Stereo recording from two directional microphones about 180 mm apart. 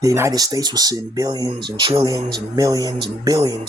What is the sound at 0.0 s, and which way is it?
A man's voice, 20° right (ahead or behind).